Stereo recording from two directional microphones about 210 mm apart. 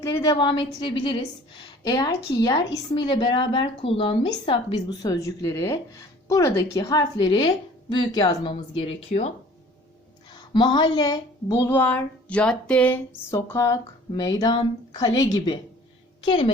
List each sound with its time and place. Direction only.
0.0 s a woman's voice: 15° left (ahead or behind)
10.3 s a woman's voice: 20° left (ahead or behind)